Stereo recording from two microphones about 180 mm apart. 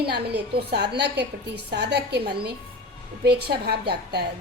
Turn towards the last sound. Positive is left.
turn(degrees=-65)  # may be behind; listen again after turning